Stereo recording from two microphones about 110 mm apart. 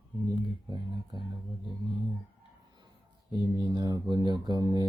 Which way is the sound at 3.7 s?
40° right (ahead or behind).